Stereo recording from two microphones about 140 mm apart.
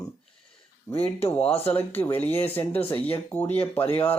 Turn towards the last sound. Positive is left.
turn(degrees=15)  # may be behind; listen again after turning